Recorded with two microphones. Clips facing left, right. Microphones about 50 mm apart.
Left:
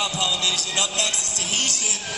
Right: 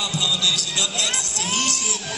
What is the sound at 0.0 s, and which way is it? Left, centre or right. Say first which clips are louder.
Speech: right 1 dB; left.